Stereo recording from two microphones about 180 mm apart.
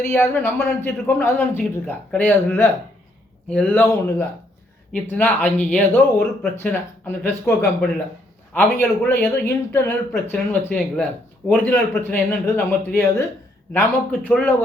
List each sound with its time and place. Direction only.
0.0 s speech: 15° left (ahead or behind)